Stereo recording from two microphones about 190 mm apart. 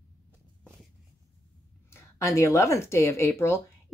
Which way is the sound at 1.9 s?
15° left (ahead or behind).